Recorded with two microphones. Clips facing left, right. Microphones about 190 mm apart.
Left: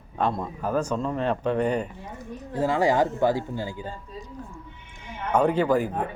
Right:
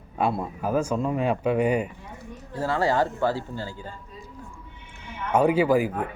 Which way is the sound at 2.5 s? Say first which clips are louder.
Left 2 dB; 15° left (ahead or behind).